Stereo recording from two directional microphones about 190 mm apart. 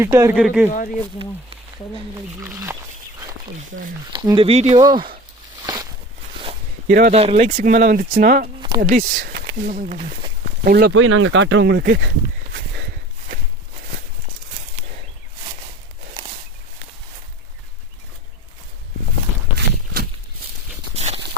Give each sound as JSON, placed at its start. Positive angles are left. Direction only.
{"t": 0.0, "sound": "speech", "side_deg": -10}
{"t": 2.4, "sound": "speech", "side_deg": -15}
{"t": 4.1, "sound": "speech", "side_deg": -25}
{"t": 4.8, "sound": "speech", "side_deg": -20}
{"t": 5.6, "sound": "walk", "side_deg": -20}
{"t": 6.8, "sound": "speech", "side_deg": -50}
{"t": 7.1, "sound": "speech", "side_deg": -35}
{"t": 19.5, "sound": "walk", "side_deg": -55}
{"t": 20.9, "sound": "walk", "side_deg": -35}